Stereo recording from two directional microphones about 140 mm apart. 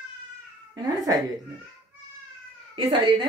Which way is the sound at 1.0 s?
25° right (ahead or behind).